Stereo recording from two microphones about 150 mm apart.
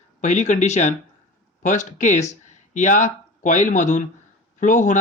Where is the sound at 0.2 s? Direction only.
50° left (ahead or behind).